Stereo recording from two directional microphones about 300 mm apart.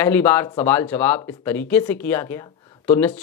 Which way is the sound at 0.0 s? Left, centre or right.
Centre.